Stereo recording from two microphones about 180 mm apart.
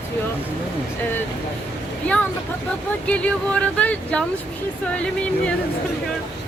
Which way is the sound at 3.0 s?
5° left (ahead or behind).